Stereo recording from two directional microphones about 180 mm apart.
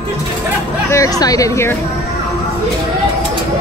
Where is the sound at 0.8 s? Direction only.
20° left (ahead or behind).